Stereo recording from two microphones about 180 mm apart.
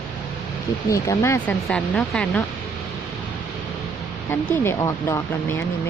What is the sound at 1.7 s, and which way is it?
Speech, 5° left (ahead or behind).